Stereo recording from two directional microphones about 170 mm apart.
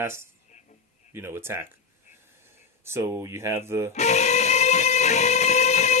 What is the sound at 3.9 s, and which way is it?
Music, 40° left (ahead or behind).